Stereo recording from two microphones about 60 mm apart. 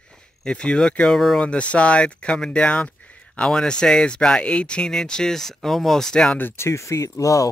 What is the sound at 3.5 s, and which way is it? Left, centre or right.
Speech, centre.